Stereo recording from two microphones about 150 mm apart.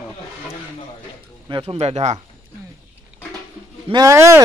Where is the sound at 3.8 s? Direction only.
25° right (ahead or behind).